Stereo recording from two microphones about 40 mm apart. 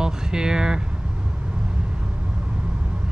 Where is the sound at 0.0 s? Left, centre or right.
Centre.